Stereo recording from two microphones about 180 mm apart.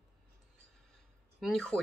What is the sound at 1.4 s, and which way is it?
Speech, 5° left (ahead or behind).